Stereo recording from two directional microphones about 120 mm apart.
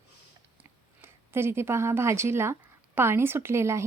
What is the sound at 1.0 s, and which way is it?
Speech, 20° right (ahead or behind).